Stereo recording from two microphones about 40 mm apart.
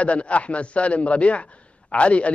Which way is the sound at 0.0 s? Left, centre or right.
Left.